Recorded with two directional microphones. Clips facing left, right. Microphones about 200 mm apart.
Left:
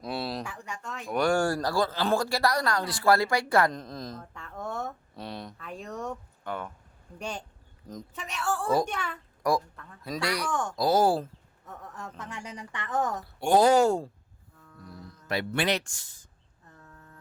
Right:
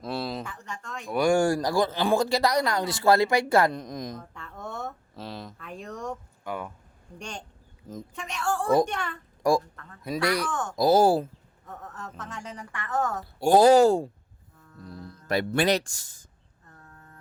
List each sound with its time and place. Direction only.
0.0 s a sound: centre (ahead or behind)
1.2 s speech: 15° right (ahead or behind)
3.7 s speech: 15° right (ahead or behind)
4.2 s a sound: centre (ahead or behind)
6.4 s speech: 10° right (ahead or behind)
7.2 s a woman's voice: 5° left (ahead or behind)
9.4 s speech: 25° right (ahead or behind)
11.9 s a woman's voice: 10° left (ahead or behind)
13.4 s speech: 35° right (ahead or behind)
15.3 s speech: 45° right (ahead or behind)